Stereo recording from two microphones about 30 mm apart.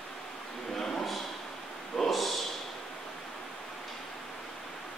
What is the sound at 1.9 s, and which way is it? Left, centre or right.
Snort, centre.